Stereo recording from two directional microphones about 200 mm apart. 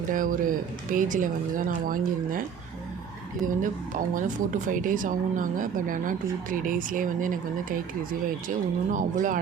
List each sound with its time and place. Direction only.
0.1 s speech: 40° right (ahead or behind)
3.4 s speech: 40° right (ahead or behind)